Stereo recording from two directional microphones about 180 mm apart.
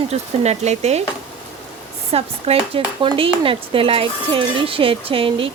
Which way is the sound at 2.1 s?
35° right (ahead or behind).